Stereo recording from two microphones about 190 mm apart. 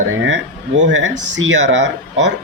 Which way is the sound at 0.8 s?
80° right.